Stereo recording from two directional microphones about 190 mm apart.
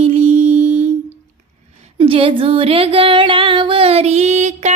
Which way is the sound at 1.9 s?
30° right (ahead or behind).